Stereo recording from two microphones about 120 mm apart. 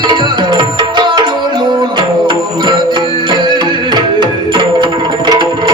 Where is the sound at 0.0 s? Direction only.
40° right (ahead or behind).